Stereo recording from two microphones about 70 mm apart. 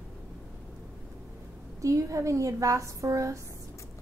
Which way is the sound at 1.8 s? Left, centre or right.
Right.